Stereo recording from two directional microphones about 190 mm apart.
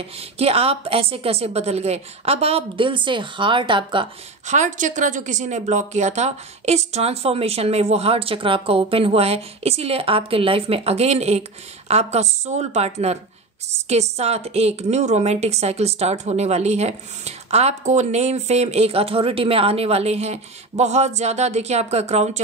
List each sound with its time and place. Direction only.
0.4 s speech: 30° right (ahead or behind)
4.5 s speech: 40° right (ahead or behind)